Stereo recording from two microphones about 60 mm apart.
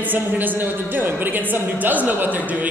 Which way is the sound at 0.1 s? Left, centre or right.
Right.